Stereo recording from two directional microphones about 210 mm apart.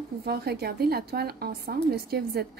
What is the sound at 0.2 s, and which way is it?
A woman's voice, 50° right (ahead or behind).